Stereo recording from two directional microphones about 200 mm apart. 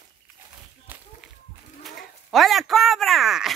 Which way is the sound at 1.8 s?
Centre (ahead or behind).